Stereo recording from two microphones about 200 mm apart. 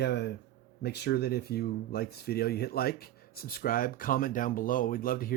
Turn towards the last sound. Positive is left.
turn(degrees=45)  # may be behind; listen again after turning